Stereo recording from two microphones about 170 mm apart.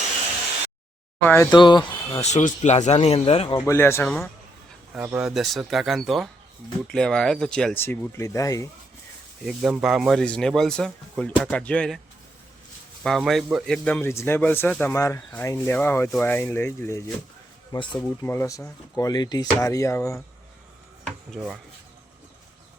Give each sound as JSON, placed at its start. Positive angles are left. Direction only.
{"t": 1.2, "sound": "speech", "side_deg": 15}
{"t": 1.5, "sound": "speech", "side_deg": 25}
{"t": 2.2, "sound": "speech", "side_deg": 40}
{"t": 3.7, "sound": "speech", "side_deg": 15}
{"t": 4.9, "sound": "speech", "side_deg": -10}
{"t": 9.5, "sound": "speech", "side_deg": 0}
{"t": 13.0, "sound": "speech", "side_deg": 0}
{"t": 13.8, "sound": "speech", "side_deg": 10}
{"t": 21.3, "sound": "speech", "side_deg": -5}